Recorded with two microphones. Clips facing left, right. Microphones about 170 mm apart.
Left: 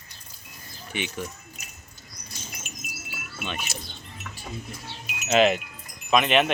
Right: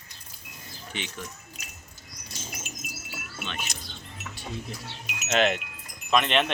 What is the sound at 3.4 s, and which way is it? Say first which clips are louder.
Speech: left 4 dB; 10° left (ahead or behind).